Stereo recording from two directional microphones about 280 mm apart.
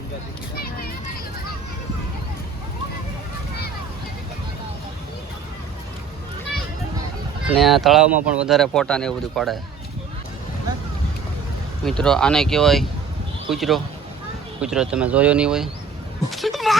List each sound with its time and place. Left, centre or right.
0.5 s children playing: left
7.5 s speech: centre
11.9 s speech: centre
16.3 s a sound: centre